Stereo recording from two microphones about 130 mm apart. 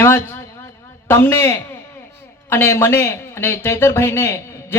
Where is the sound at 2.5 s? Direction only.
20° left (ahead or behind).